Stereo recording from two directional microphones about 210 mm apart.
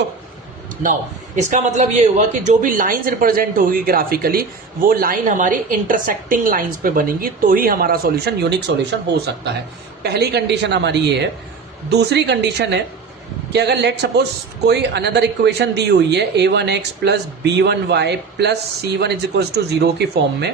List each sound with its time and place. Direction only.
1.4 s speech: 35° right (ahead or behind); by 20.5 s 50° right (ahead or behind)